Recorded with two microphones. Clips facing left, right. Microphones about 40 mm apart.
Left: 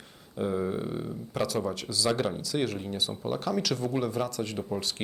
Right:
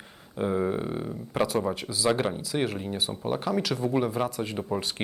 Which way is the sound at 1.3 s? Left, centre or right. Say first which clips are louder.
Right 4 dB; right.